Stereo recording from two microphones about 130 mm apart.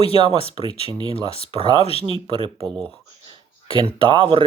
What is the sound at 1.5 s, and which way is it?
Speech, 35° right (ahead or behind).